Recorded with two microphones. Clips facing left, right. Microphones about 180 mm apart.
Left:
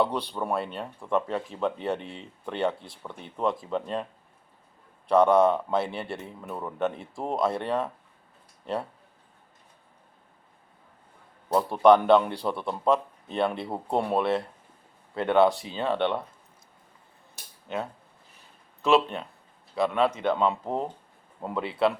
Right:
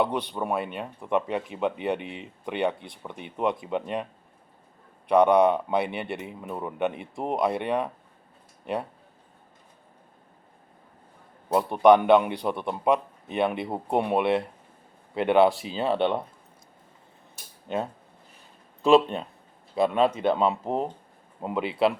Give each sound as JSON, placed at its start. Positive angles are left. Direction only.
{"t": 0.0, "sound": "speech", "side_deg": -15}
{"t": 5.0, "sound": "speech", "side_deg": -15}
{"t": 11.5, "sound": "speech", "side_deg": -15}
{"t": 19.7, "sound": "speech", "side_deg": -20}